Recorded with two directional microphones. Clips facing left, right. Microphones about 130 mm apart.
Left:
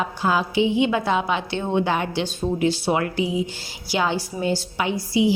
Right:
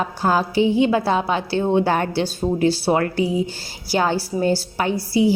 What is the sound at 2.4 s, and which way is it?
Speech, 25° right (ahead or behind).